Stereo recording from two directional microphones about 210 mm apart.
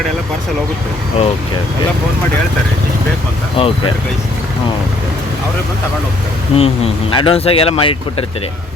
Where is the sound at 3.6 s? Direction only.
25° left (ahead or behind).